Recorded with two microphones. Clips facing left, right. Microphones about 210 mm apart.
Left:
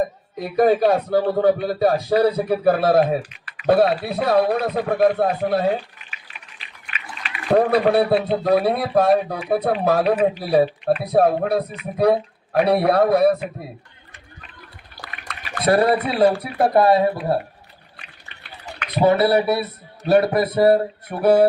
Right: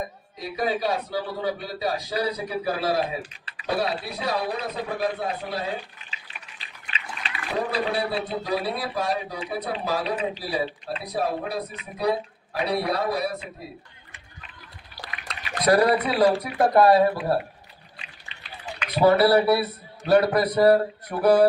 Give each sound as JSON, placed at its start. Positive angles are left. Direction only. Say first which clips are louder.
{"t": 0.3, "sound": "a man's voice", "louder": "left 10 dB", "side_deg": 55}
{"t": 7.5, "sound": "a man's voice", "louder": "left 10 dB", "side_deg": 60}
{"t": 15.6, "sound": "speech", "louder": "left 2 dB", "side_deg": 30}
{"t": 17.9, "sound": "a sound", "louder": "even", "side_deg": 55}
{"t": 18.9, "sound": "speech", "louder": "left 1 dB", "side_deg": 20}